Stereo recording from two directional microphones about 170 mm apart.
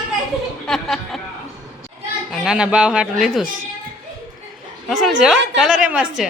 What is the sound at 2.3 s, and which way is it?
A woman's voice, 5° right (ahead or behind).